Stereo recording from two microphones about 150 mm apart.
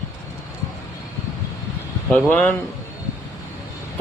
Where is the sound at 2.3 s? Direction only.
10° left (ahead or behind).